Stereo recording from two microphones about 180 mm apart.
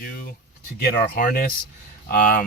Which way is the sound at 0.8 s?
55° left (ahead or behind).